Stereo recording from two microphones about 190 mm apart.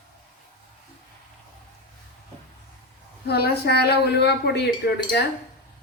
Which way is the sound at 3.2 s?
60° left (ahead or behind).